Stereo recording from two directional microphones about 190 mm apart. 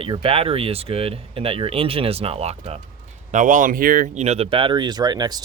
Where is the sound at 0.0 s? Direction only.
30° right (ahead or behind).